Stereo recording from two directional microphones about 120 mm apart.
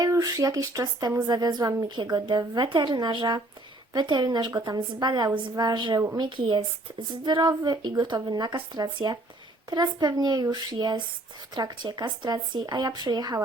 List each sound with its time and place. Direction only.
0.0 s speech: 30° right (ahead or behind)